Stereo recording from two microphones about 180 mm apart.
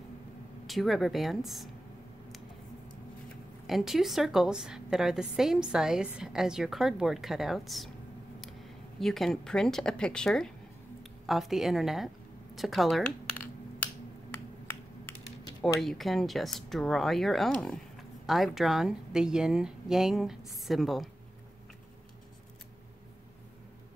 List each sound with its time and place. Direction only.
0.7 s speech: centre (ahead or behind)
3.6 s speech: centre (ahead or behind)
9.0 s speech: centre (ahead or behind)
15.8 s speech: centre (ahead or behind)